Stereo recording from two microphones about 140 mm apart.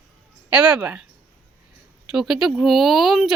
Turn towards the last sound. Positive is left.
turn(degrees=0)  # may be behind; listen again after turning